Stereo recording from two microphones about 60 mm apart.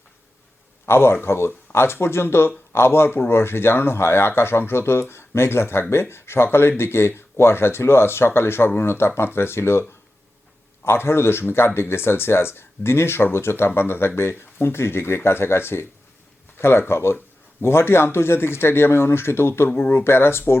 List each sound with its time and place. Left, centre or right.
0.9 s speech: left
10.8 s speech: left